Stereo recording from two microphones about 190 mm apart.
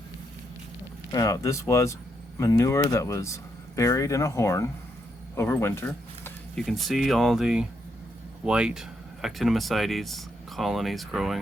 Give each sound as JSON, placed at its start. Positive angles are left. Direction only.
{"t": 1.1, "sound": "speech", "side_deg": 20}
{"t": 5.3, "sound": "a sound", "side_deg": 15}
{"t": 6.7, "sound": "speech", "side_deg": 0}